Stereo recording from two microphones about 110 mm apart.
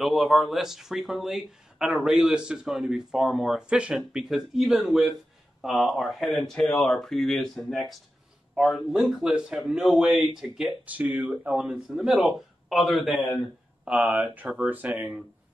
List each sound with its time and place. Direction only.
0.0 s speech: centre (ahead or behind)
11.1 s speech: 15° right (ahead or behind)
13.8 s speech: 15° right (ahead or behind)